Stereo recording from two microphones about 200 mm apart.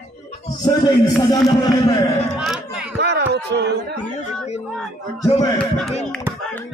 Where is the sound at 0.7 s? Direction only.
20° left (ahead or behind).